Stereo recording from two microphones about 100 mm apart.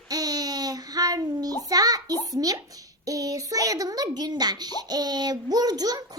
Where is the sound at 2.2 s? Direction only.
40° right (ahead or behind).